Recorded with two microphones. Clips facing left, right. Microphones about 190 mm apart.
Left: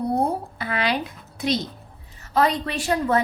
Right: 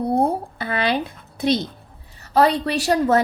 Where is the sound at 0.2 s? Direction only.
30° right (ahead or behind).